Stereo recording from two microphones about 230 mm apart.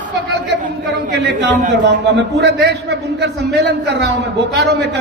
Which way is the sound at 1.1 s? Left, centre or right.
Right.